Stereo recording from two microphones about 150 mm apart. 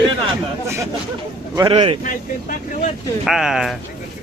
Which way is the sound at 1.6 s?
35° right (ahead or behind).